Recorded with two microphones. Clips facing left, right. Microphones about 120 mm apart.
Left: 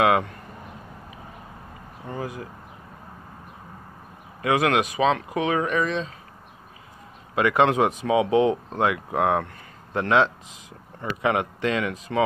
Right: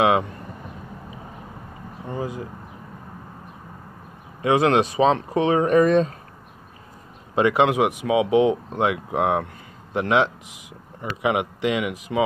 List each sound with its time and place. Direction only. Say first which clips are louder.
0.0 s speech: right 1 dB; 20° right (ahead or behind)
2.0 s speech: right 3 dB; 20° right (ahead or behind)
4.4 s speech: right 3 dB; 25° right (ahead or behind)
5.8 s speech: right 9 dB; 50° right (ahead or behind)
7.3 s speech: right 1 dB; 20° right (ahead or behind)